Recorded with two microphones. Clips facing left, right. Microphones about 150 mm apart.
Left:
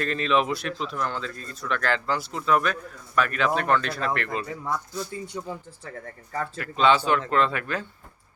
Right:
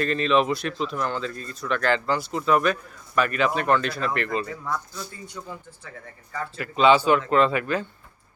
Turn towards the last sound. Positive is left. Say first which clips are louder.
# right 4 dB
turn(degrees=-5)  # may be behind; listen again after turning